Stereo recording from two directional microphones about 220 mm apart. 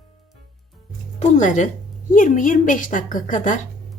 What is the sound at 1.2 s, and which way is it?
Speech, 35° left (ahead or behind).